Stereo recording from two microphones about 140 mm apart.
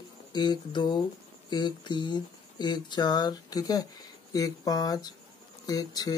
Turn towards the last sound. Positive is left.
turn(degrees=25)  # may be behind; listen again after turning